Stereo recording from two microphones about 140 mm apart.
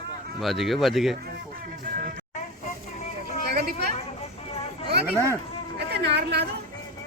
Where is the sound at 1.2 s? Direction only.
90° right.